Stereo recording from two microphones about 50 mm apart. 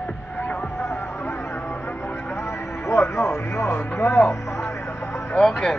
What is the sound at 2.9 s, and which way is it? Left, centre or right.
Radio, left.